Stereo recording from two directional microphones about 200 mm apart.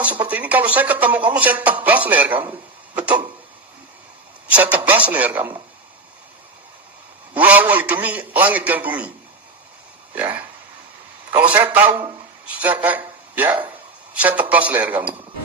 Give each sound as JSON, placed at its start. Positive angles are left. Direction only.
{"t": 0.0, "sound": "a man's voice", "side_deg": -5}
{"t": 4.4, "sound": "a man's voice", "side_deg": -5}
{"t": 7.3, "sound": "a man's voice", "side_deg": -5}
{"t": 10.2, "sound": "a man's voice", "side_deg": -10}
{"t": 11.5, "sound": "a man's voice", "side_deg": -10}
{"t": 11.9, "sound": "speech", "side_deg": -25}
{"t": 12.5, "sound": "a man's voice", "side_deg": -5}